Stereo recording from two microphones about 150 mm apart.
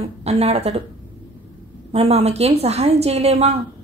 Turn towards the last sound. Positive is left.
turn(degrees=-45)  # may be behind; listen again after turning